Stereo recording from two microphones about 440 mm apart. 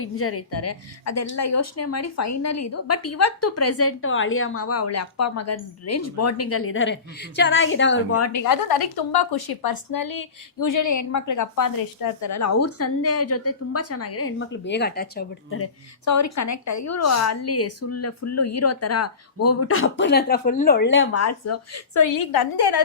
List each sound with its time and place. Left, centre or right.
0.0 s a woman's voice: left
8.4 s a woman's voice: left